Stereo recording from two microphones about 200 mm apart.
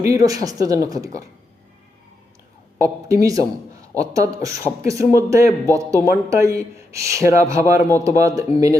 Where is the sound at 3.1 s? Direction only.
15° right (ahead or behind).